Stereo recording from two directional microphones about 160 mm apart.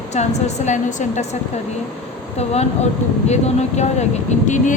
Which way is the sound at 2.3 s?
40° left (ahead or behind).